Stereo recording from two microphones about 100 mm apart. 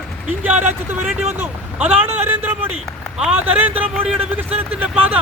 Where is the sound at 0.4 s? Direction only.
20° right (ahead or behind).